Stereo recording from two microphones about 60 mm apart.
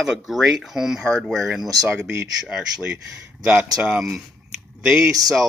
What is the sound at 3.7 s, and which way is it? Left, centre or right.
Speech, centre.